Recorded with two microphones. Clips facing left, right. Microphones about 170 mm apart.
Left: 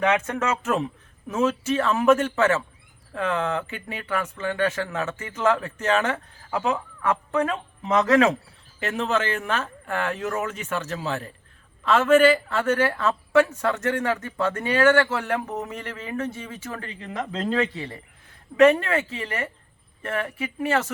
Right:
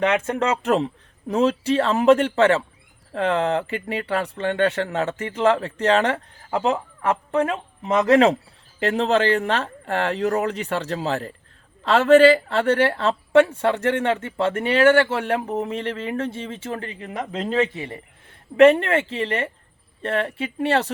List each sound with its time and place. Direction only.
0.1 s a woman's voice: 30° right (ahead or behind)